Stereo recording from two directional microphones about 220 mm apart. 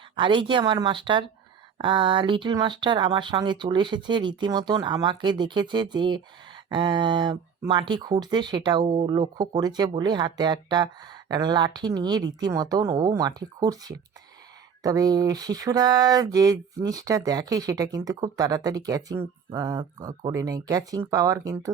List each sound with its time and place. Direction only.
0.2 s speech: 20° right (ahead or behind)